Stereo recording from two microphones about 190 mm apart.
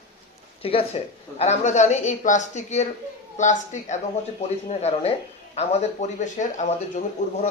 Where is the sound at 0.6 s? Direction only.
30° left (ahead or behind).